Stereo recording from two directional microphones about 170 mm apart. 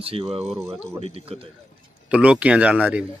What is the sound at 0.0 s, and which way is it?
Speech, 35° right (ahead or behind).